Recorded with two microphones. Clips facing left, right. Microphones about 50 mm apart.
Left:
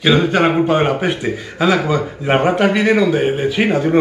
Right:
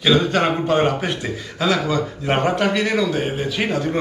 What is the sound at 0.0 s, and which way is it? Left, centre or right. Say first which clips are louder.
A man's voice: left 3 dB; centre.